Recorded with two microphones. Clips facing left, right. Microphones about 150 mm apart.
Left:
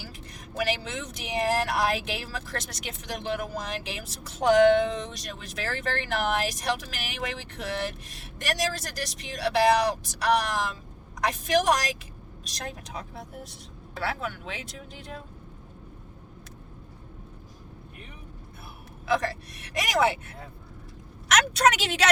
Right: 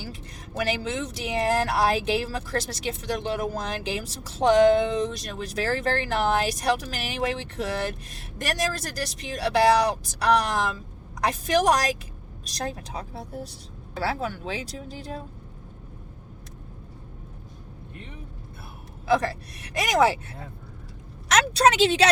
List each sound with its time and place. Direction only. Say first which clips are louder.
0.6 s speech: right 3 dB; 35° right (ahead or behind)
19.0 s speech: right 3 dB; 35° right (ahead or behind)
21.2 s speech: right 2 dB; 35° right (ahead or behind)